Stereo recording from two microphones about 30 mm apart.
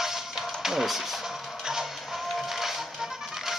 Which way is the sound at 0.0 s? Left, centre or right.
Centre.